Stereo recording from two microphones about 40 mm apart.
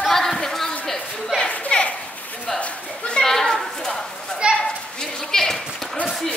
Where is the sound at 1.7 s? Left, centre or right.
Left.